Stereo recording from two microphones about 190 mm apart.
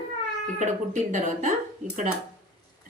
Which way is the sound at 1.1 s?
40° right (ahead or behind).